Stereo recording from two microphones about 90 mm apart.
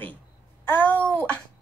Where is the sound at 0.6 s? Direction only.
25° left (ahead or behind).